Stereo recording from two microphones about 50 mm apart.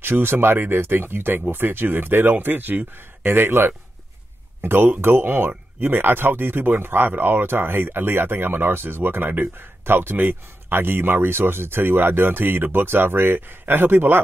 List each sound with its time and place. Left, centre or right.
0.0 s speech: right